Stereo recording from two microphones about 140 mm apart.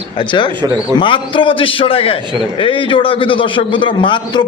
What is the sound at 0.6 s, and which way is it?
Speech, 35° right (ahead or behind).